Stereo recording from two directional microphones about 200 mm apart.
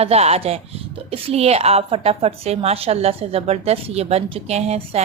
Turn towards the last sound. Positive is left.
turn(degrees=-35)  # may be behind; listen again after turning